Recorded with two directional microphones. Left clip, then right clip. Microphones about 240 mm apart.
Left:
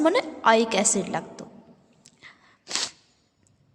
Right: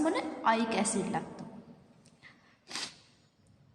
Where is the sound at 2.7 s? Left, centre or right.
Left.